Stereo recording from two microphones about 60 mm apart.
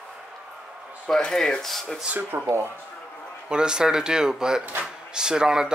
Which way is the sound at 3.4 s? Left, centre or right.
Centre.